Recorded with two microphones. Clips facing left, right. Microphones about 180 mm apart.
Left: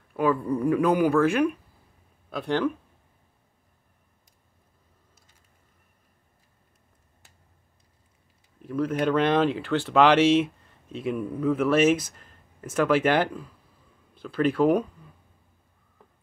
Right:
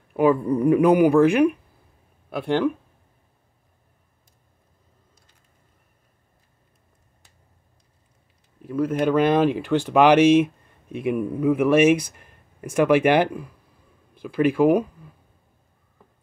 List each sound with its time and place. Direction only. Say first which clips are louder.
0.1 s speech: right 5 dB; 20° right (ahead or behind)
8.6 s speech: right 3 dB; 10° right (ahead or behind)